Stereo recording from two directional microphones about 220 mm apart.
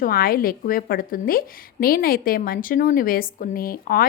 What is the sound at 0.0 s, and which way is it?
A woman's voice, 40° left (ahead or behind).